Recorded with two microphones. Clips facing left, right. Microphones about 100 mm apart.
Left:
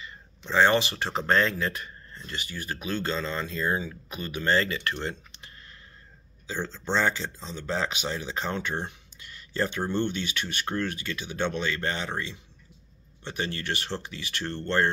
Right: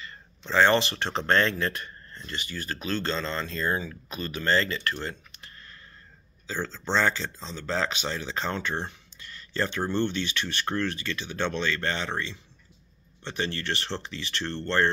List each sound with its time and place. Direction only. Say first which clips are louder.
0.0 s speech: even; 10° left (ahead or behind)